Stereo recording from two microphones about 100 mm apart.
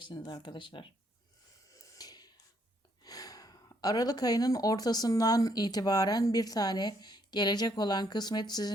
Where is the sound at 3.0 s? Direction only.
40° left (ahead or behind).